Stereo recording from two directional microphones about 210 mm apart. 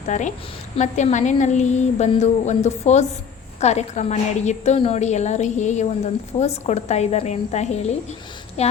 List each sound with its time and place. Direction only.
0.1 s a woman's voice: 35° left (ahead or behind)